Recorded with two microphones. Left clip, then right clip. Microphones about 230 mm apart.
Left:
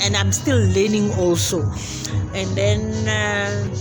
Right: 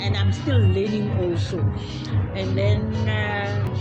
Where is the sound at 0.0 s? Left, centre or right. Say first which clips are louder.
Left 7 dB; left.